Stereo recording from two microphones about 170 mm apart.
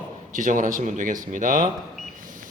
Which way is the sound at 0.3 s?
50° right (ahead or behind).